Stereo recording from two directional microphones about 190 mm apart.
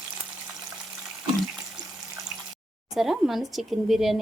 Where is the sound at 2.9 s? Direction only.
Centre (ahead or behind).